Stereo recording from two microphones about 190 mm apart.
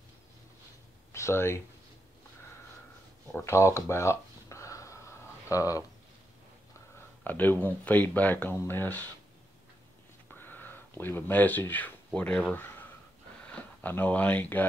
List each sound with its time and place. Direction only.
1.1 s speech: 15° left (ahead or behind)
3.3 s a sound: 10° left (ahead or behind)
5.5 s speech: 15° left (ahead or behind)
7.2 s speech: 10° left (ahead or behind)
10.4 s speech: 10° left (ahead or behind)